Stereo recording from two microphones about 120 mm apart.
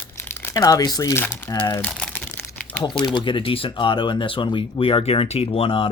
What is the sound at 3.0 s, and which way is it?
Speech, 40° left (ahead or behind).